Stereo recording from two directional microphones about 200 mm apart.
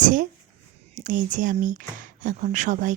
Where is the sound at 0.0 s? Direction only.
40° right (ahead or behind).